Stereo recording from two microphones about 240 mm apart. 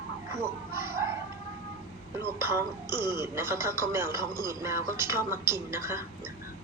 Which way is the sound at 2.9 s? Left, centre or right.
Centre.